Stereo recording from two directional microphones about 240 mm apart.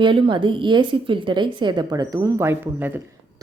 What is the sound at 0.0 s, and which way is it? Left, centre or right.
A woman's voice, right.